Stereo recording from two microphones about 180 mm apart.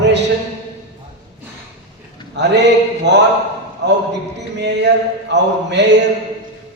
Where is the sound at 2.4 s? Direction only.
75° right (ahead or behind).